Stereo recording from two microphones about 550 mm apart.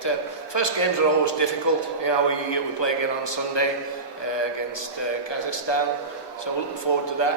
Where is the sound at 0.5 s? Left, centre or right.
Left.